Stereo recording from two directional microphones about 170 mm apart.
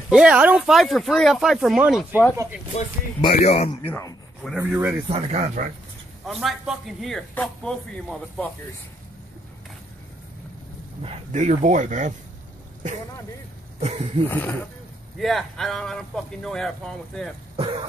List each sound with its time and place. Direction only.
0.1 s a man's voice: 5° right (ahead or behind)
2.7 s speech: 35° left (ahead or behind)
3.8 s speech: 10° left (ahead or behind)
4.6 s speech: 15° right (ahead or behind)
5.0 s speech: 35° right (ahead or behind)
6.2 s a man's voice: centre (ahead or behind)
11.0 s speech: 40° right (ahead or behind)
13.7 s speech: 40° right (ahead or behind)
14.3 s a man's voice: 10° left (ahead or behind)
17.6 s speech: 35° right (ahead or behind)